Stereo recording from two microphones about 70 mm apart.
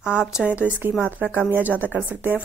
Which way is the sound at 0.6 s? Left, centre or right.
Right.